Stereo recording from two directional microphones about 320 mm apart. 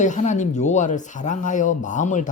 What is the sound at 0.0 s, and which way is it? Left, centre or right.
Speech, left.